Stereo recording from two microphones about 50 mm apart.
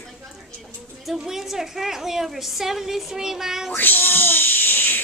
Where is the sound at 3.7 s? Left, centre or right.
Left.